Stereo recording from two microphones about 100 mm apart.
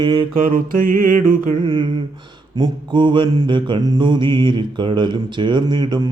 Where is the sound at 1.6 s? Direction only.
55° right (ahead or behind).